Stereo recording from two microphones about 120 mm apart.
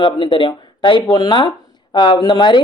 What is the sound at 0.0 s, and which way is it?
Speech, 45° left (ahead or behind).